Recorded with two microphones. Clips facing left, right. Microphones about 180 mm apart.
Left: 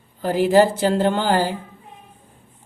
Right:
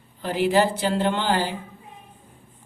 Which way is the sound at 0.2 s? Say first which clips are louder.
Left 5 dB; 45° left (ahead or behind).